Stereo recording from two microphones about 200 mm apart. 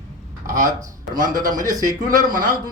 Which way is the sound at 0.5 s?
15° right (ahead or behind).